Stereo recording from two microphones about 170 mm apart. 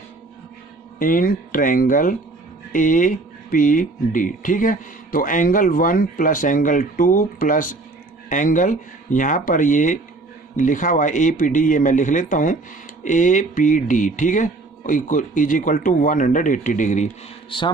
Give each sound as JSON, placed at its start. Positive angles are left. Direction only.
{"t": 0.9, "sound": "speech", "side_deg": 55}
{"t": 17.5, "sound": "a man's voice", "side_deg": 30}